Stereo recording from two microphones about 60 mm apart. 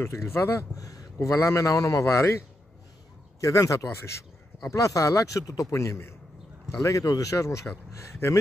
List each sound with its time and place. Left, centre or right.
0.0 s speech: left
0.7 s speech: left
1.2 s a man's voice: left
6.8 s speech: left